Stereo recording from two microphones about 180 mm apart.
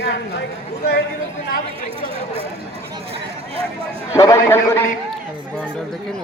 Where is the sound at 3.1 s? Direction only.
35° right (ahead or behind).